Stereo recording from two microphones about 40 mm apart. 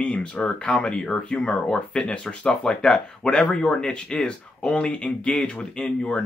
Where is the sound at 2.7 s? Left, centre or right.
Centre.